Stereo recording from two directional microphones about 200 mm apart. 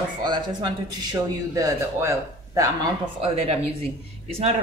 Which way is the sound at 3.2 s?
30° right (ahead or behind).